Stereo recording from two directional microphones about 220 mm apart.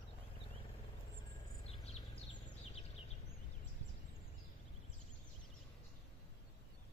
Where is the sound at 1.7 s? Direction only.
30° left (ahead or behind).